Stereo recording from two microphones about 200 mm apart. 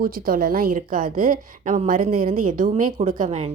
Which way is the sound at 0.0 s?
45° right (ahead or behind).